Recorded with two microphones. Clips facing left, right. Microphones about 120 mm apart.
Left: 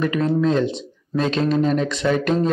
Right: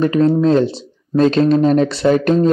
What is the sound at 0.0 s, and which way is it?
Speech, 35° right (ahead or behind).